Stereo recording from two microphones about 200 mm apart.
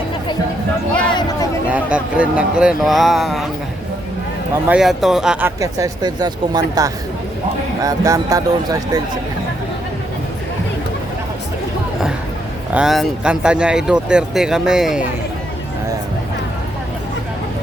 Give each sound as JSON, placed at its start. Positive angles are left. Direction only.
{"t": 1.7, "sound": "speech", "side_deg": -5}
{"t": 4.5, "sound": "speech", "side_deg": -5}
{"t": 12.7, "sound": "speech", "side_deg": 0}